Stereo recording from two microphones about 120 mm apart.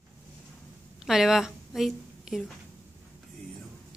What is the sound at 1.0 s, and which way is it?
A woman's voice, 5° right (ahead or behind).